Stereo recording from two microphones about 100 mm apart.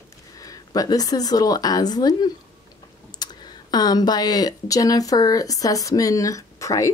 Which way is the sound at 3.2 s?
45° left (ahead or behind).